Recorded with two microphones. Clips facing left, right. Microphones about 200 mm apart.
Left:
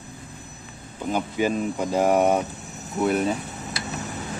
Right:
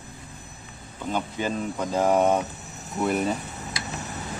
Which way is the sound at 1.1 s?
10° left (ahead or behind).